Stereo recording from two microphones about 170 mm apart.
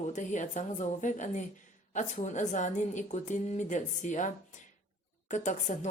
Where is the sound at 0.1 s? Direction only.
45° left (ahead or behind).